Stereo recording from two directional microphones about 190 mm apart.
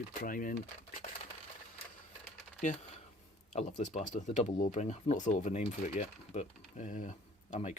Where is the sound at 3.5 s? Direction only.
40° left (ahead or behind).